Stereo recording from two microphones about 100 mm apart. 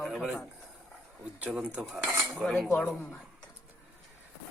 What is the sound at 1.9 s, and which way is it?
Cutlery, 15° right (ahead or behind).